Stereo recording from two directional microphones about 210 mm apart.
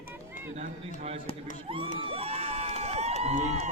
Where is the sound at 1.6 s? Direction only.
25° right (ahead or behind).